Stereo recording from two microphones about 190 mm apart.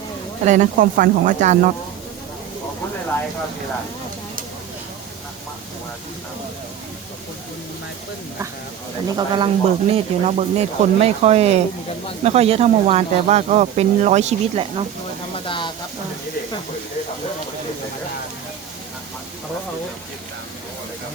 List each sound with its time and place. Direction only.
0.4 s speech: 40° right (ahead or behind)
9.1 s speech: 25° right (ahead or behind)
15.4 s a sound: 25° left (ahead or behind)